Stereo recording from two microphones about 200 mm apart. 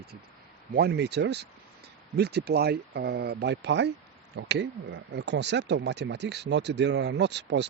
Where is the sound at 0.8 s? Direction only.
55° right (ahead or behind).